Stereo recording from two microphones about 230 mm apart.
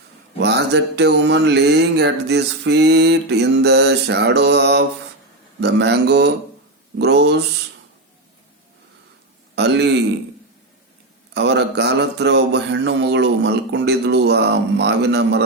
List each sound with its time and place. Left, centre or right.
0.3 s mantra: right
9.6 s a man's voice: right
11.3 s mantra: right